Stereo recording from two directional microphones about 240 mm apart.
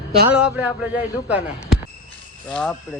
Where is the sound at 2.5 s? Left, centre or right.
Centre.